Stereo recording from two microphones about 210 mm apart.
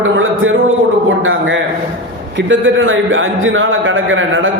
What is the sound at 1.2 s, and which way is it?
A man's voice, 65° right (ahead or behind).